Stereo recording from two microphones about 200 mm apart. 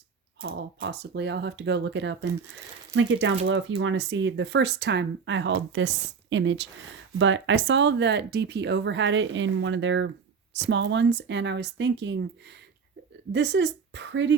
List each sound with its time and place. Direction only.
0.4 s speech: 60° right (ahead or behind)
13.3 s speech: 60° right (ahead or behind)